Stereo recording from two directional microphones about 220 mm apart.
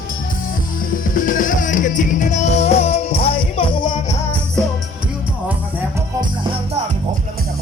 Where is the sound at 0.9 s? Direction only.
40° left (ahead or behind); by 4.2 s 20° left (ahead or behind).